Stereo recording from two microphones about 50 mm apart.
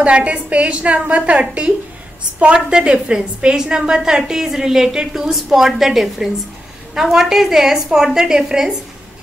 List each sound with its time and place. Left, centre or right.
0.0 s a woman's voice: right